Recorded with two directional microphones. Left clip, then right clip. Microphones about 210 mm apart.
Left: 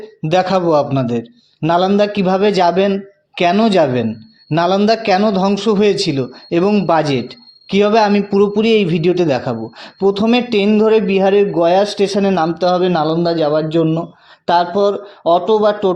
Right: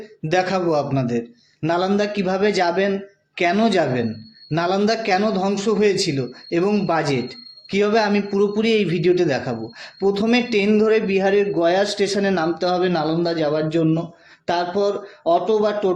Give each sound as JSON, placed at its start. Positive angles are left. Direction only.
{"t": 0.3, "sound": "a man's voice", "side_deg": 35}